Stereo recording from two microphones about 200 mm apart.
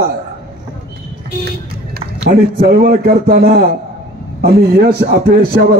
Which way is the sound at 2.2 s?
50° right (ahead or behind).